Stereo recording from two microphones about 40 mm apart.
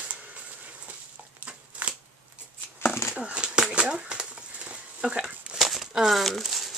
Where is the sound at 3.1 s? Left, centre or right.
Right.